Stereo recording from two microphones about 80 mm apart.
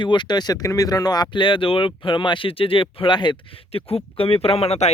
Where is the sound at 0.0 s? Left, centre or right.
Left.